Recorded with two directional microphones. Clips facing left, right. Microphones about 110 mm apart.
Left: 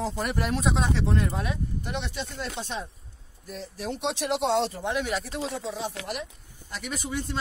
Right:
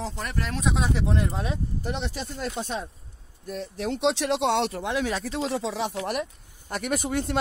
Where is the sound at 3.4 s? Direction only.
65° right (ahead or behind); by 5.9 s 90° right.